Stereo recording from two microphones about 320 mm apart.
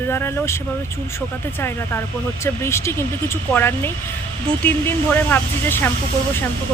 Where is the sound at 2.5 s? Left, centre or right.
Centre.